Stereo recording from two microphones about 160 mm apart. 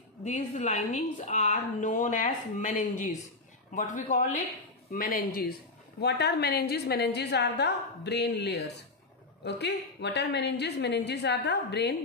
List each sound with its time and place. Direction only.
0.2 s a woman's voice: 50° left (ahead or behind)
4.9 s a woman's voice: 60° left (ahead or behind)
5.9 s a woman's voice: 90° left